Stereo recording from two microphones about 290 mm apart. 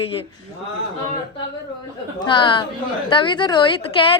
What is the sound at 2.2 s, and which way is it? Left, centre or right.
A woman's voice, centre.